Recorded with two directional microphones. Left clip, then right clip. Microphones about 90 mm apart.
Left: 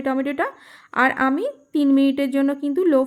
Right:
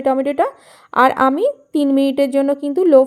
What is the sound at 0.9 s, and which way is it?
A woman's voice, 50° right (ahead or behind).